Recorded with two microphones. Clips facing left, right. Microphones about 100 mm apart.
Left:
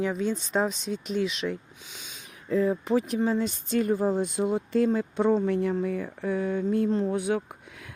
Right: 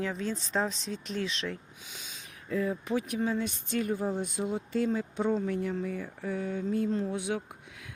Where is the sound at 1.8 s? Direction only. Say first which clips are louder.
Left 1 dB; centre (ahead or behind).